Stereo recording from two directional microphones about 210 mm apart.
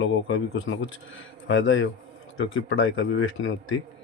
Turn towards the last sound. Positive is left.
turn(degrees=70)  # may be behind; listen again after turning